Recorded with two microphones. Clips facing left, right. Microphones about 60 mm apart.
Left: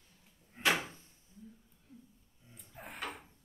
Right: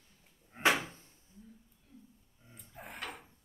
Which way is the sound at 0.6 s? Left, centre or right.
Right.